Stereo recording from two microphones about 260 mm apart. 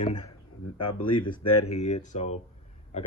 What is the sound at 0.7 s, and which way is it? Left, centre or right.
Speech, left.